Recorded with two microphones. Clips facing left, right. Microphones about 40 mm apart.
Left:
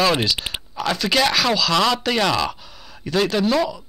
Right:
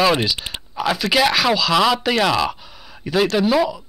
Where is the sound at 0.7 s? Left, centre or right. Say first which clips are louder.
Right 2 dB; centre.